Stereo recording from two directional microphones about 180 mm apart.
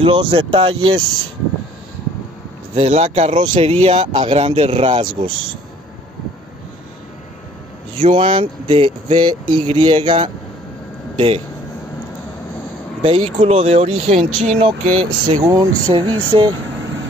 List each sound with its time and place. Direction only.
0.0 s speech: 30° right (ahead or behind)
2.7 s speech: 35° right (ahead or behind)
8.0 s speech: 30° right (ahead or behind)
13.0 s speech: 35° right (ahead or behind)